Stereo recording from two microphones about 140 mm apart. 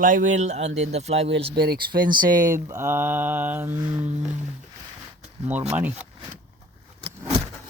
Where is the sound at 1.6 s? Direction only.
90° right.